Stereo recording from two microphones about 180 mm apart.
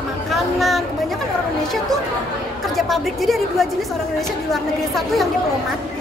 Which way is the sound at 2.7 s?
Centre (ahead or behind).